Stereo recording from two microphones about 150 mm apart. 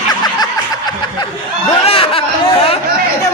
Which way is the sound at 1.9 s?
40° left (ahead or behind).